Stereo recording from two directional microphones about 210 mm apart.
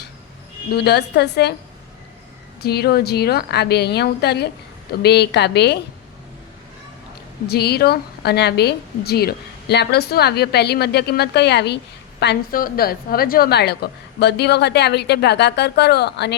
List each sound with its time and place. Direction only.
0.7 s a woman's voice: 50° left (ahead or behind)
2.6 s a woman's voice: 50° left (ahead or behind)
7.4 s a woman's voice: 50° left (ahead or behind)